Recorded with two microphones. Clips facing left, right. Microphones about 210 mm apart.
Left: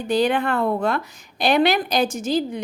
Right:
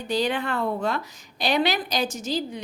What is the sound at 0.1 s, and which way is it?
A woman's voice, 55° left (ahead or behind).